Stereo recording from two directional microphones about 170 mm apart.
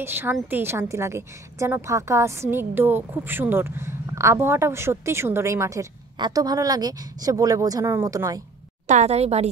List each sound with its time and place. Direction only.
0.0 s a woman's voice: 15° right (ahead or behind)
8.8 s a woman's voice: 45° right (ahead or behind)